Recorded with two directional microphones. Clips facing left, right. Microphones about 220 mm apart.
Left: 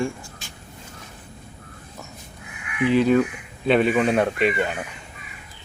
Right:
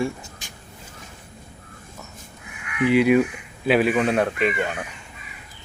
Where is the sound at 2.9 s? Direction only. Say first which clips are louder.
Right 1 dB; 10° right (ahead or behind).